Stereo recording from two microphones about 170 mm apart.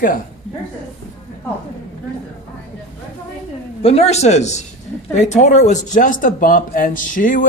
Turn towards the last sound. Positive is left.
turn(degrees=50)  # may be behind; listen again after turning